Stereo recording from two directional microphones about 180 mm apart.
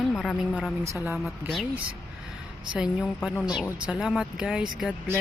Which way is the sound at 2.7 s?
5° right (ahead or behind).